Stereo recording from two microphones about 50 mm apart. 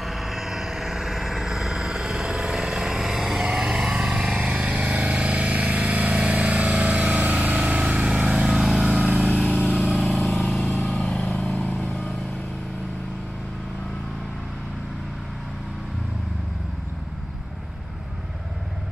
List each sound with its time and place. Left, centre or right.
0.0 s a sound: centre
3.4 s vehicle: centre
9.8 s vehicle: left
11.2 s vehicle: left